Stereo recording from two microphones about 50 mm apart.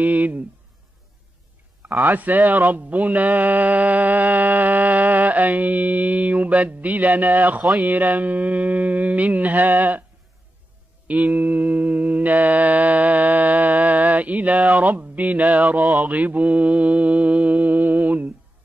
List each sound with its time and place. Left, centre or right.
0.0 s speech: right
1.8 s speech: right
11.1 s mantra: right
15.9 s speech: right